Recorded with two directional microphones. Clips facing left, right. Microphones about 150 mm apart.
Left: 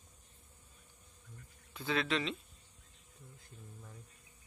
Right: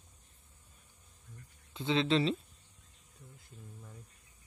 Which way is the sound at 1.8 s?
25° right (ahead or behind).